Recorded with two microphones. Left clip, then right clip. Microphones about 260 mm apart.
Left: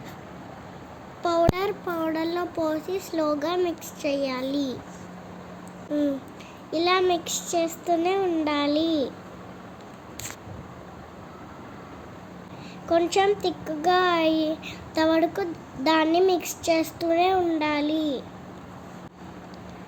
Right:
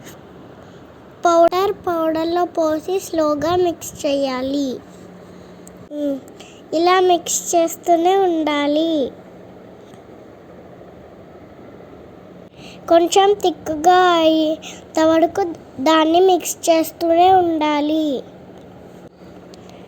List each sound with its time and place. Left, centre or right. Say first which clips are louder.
1.2 s a child's voice: right 10 dB; right
5.9 s a child's voice: right 3 dB; centre
12.8 s a child's voice: right 9 dB; right